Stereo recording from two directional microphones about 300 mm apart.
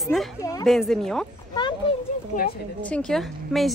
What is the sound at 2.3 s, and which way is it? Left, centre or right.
Speech, left.